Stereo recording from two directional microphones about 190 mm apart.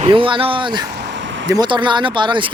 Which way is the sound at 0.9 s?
60° right (ahead or behind).